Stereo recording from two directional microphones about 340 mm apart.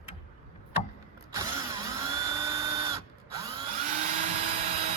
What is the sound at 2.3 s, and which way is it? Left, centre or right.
Drill, centre.